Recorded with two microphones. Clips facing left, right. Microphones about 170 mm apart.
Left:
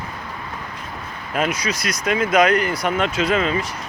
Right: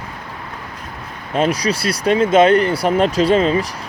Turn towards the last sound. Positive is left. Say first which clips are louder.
# right 6 dB
turn(degrees=-35)  # may be behind; listen again after turning